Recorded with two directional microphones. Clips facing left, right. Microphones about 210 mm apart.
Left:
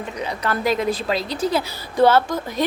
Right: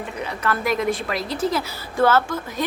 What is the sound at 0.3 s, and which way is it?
A woman's voice, 35° left (ahead or behind).